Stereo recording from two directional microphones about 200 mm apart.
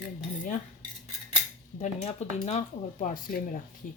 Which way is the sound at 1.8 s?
35° left (ahead or behind).